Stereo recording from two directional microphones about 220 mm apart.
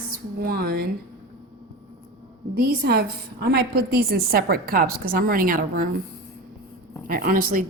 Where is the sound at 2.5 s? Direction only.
45° right (ahead or behind).